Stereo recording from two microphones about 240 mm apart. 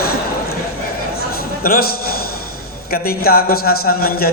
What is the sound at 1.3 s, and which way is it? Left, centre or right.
A man's voice, left.